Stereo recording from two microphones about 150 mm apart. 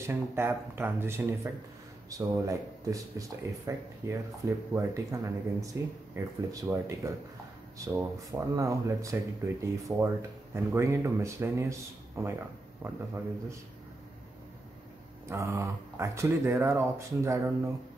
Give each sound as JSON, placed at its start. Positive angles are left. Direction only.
{"t": 0.0, "sound": "speech", "side_deg": -15}
{"t": 15.2, "sound": "speech", "side_deg": -20}